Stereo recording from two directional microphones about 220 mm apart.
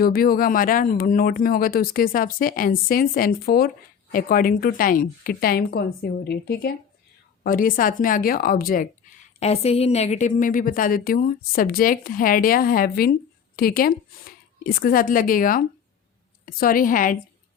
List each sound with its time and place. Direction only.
0.0 s a woman's voice: 40° left (ahead or behind)
9.4 s a woman's voice: 30° left (ahead or behind)